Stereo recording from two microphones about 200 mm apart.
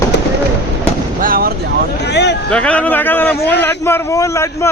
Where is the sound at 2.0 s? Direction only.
55° left (ahead or behind).